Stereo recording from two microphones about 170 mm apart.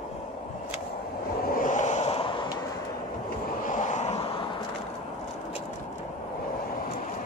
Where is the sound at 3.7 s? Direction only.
45° left (ahead or behind).